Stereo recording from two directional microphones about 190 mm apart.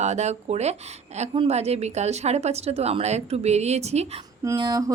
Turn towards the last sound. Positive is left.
turn(degrees=-20)  # may be behind; listen again after turning